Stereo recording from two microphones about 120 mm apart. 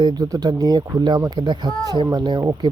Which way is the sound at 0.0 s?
35° right (ahead or behind).